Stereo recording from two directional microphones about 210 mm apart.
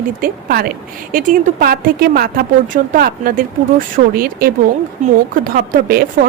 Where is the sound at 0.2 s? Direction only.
45° right (ahead or behind).